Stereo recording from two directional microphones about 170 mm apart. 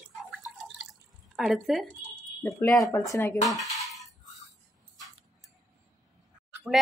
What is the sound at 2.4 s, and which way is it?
Speech, 10° left (ahead or behind).